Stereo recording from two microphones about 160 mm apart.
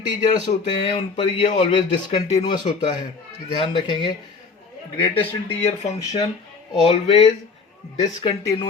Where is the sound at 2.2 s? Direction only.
45° left (ahead or behind).